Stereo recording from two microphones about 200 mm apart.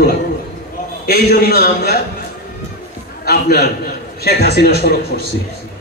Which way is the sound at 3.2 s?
55° left (ahead or behind).